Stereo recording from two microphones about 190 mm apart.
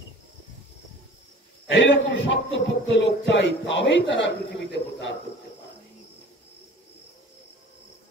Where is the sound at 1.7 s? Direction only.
70° left (ahead or behind).